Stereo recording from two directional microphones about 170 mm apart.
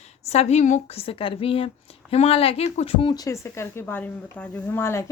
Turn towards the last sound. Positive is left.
turn(degrees=15)  # may be behind; listen again after turning